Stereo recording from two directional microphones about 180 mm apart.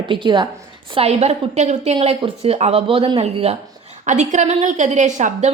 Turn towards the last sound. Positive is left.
turn(degrees=-45)  # may be behind; listen again after turning